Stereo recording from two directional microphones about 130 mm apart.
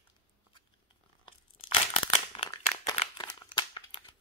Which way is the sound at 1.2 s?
40° left (ahead or behind).